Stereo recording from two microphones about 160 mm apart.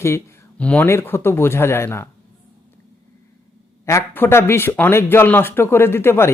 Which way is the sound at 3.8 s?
15° left (ahead or behind).